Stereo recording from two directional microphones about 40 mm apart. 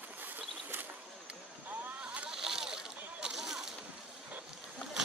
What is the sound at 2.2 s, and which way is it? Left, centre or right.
Boat, centre.